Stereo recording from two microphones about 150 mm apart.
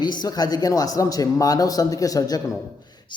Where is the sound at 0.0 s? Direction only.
30° left (ahead or behind).